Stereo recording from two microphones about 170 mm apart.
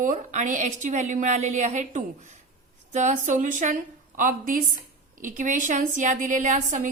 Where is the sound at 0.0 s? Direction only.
50° right (ahead or behind).